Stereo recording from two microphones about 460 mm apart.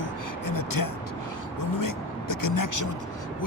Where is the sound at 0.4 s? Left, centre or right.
Left.